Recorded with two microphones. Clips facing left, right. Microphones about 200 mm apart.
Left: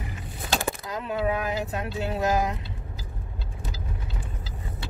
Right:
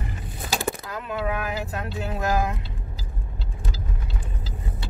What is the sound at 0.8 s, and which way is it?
Speech, 20° left (ahead or behind).